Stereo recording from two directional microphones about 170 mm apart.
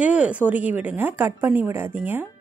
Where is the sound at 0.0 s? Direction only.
10° right (ahead or behind).